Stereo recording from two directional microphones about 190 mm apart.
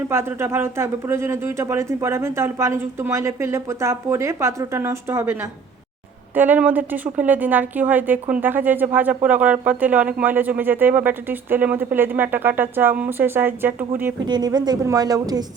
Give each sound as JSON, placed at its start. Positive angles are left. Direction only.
{"t": 0.1, "sound": "a woman's voice", "side_deg": -15}
{"t": 14.3, "sound": "a woman's voice", "side_deg": -20}